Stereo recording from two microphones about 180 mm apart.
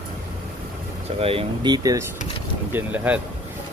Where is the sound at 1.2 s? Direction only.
30° right (ahead or behind).